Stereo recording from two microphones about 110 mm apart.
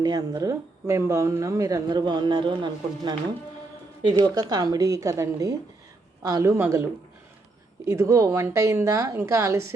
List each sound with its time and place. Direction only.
0.0 s speech: 35° right (ahead or behind)
4.2 s speech: 35° right (ahead or behind)
7.9 s speech: 30° right (ahead or behind)